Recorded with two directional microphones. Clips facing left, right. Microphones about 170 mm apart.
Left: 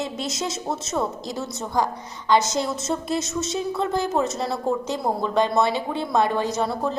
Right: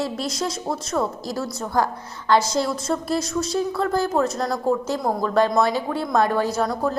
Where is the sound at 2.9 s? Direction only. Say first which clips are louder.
Right 2 dB; 10° left (ahead or behind).